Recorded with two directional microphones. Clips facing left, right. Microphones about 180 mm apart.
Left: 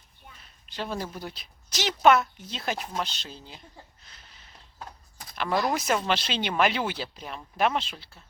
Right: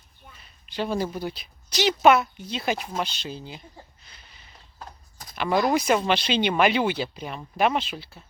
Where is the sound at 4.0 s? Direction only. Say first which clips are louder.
Right 1 dB; centre (ahead or behind).